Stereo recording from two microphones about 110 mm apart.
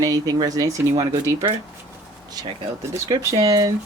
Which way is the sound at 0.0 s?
35° right (ahead or behind).